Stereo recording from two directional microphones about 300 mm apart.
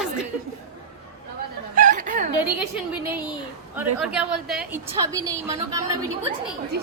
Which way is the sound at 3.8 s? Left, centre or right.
Centre.